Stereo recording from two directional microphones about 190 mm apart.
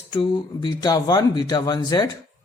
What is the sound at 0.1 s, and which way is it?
Speech, 25° left (ahead or behind).